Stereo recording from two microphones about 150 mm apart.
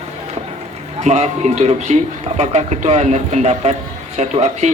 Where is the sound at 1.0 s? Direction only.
50° right (ahead or behind).